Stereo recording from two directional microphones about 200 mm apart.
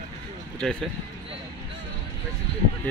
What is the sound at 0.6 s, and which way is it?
Speech, 5° left (ahead or behind).